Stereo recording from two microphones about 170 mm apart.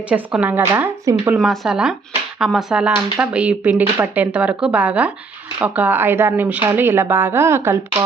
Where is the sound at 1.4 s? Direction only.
Centre (ahead or behind).